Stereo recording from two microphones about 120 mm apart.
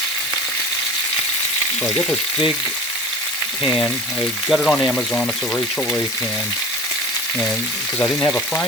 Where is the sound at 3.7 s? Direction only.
15° left (ahead or behind).